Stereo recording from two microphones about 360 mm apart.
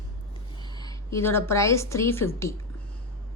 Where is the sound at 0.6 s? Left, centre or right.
Centre.